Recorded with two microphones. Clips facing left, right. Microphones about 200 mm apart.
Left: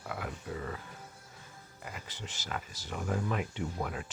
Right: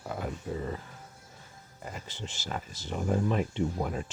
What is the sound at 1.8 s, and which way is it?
Speech, 30° right (ahead or behind).